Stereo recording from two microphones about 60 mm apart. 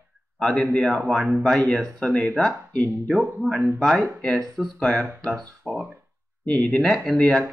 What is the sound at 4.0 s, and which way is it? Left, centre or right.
Speech, centre.